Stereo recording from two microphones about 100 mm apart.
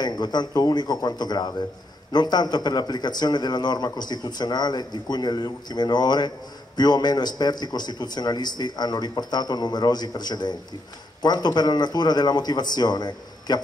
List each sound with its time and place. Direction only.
0.0 s a man's voice: 45° left (ahead or behind)